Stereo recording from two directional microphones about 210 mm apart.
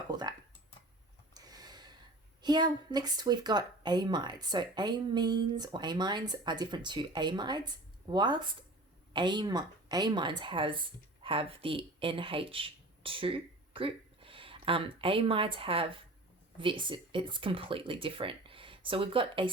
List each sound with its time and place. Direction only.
0.1 s speech: 20° right (ahead or behind)
1.3 s a sound: 20° right (ahead or behind)
2.4 s speech: 20° right (ahead or behind)